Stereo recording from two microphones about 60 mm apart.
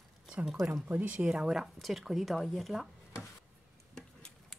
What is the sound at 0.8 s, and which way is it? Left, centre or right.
Speech, right.